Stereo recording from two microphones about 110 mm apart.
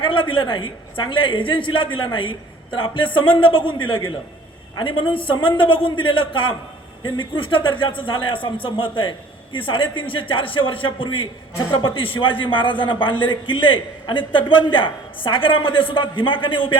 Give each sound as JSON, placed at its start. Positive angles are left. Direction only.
{"t": 0.0, "sound": "a man's voice", "side_deg": 50}